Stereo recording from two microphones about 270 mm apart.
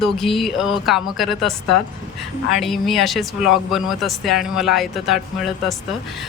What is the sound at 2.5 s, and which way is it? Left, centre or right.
Speech, centre.